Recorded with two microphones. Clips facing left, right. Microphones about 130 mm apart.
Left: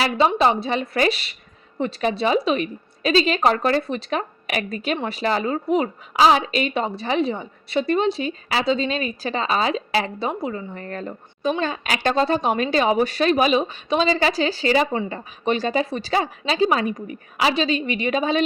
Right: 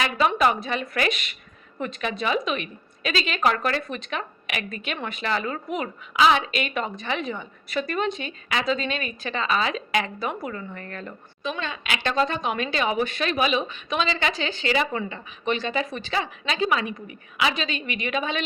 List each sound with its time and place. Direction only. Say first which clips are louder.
0.0 s a woman's voice: left 3 dB; 30° left (ahead or behind)